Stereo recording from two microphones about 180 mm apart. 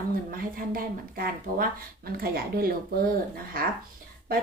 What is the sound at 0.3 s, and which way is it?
Speech, 55° right (ahead or behind).